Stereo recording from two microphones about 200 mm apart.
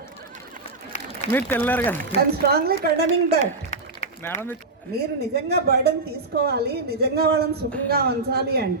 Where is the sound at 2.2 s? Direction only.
50° right (ahead or behind).